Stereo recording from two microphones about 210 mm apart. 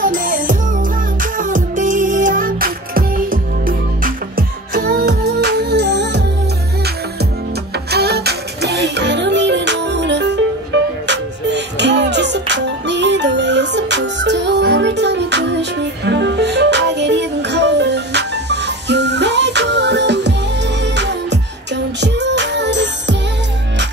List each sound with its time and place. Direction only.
0.0 s music: 40° right (ahead or behind)
7.9 s music: 50° right (ahead or behind)